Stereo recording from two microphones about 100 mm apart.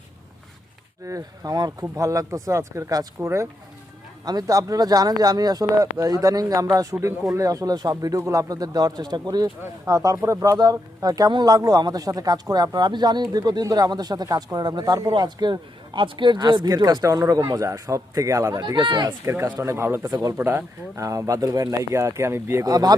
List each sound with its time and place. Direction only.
1.0 s speech: 35° right (ahead or behind)
19.2 s speech: 25° right (ahead or behind)
22.6 s speech: 40° right (ahead or behind)